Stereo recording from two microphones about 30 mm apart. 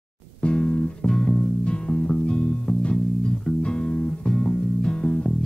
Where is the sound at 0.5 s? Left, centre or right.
Left.